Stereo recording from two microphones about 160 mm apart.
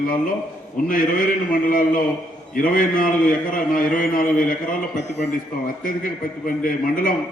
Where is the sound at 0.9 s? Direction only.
60° left (ahead or behind).